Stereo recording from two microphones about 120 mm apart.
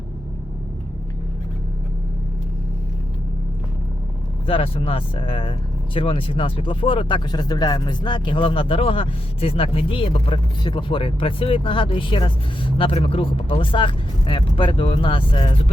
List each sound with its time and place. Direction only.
4.4 s speech: 50° left (ahead or behind)